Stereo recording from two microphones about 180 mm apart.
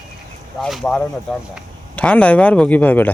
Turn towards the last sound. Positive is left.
turn(degrees=10)  # may be behind; listen again after turning